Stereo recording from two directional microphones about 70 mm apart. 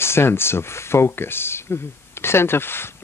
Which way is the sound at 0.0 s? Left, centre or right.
Left.